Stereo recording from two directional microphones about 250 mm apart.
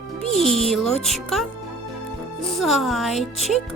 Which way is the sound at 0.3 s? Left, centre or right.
Right.